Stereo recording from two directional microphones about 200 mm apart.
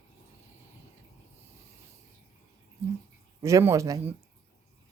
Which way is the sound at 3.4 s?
15° right (ahead or behind).